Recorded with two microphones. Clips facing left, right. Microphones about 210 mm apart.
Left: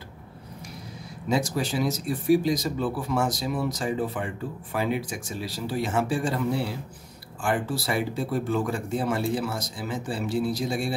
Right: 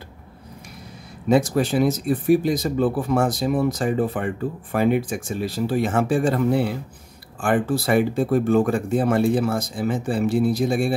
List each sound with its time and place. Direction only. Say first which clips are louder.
1.3 s speech: right 7 dB; 55° right (ahead or behind)